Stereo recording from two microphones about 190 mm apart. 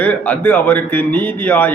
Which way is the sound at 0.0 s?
10° left (ahead or behind).